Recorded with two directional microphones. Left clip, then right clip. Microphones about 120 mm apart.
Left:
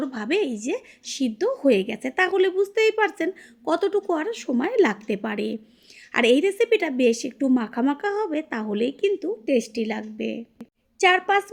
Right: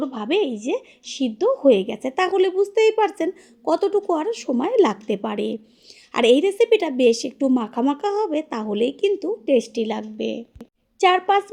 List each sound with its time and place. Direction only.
0.0 s a woman's voice: 20° right (ahead or behind)